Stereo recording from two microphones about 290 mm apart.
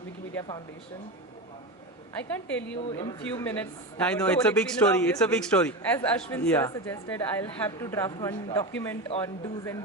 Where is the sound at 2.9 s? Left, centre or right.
Centre.